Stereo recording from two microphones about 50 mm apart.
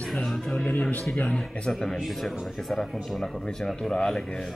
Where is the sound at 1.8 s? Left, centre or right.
Centre.